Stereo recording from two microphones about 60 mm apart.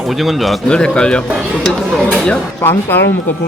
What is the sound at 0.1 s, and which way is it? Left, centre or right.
Speech, centre.